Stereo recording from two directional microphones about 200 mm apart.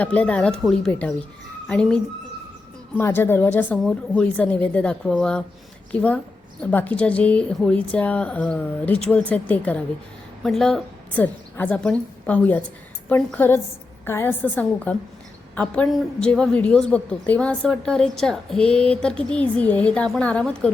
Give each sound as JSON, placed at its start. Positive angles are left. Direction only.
{"t": 0.0, "sound": "a woman's voice", "side_deg": 5}